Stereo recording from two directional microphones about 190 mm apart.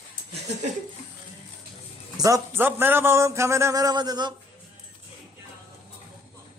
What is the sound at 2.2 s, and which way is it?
A man's voice, 15° right (ahead or behind).